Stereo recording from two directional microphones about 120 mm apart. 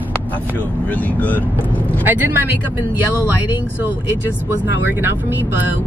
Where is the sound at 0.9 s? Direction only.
15° left (ahead or behind).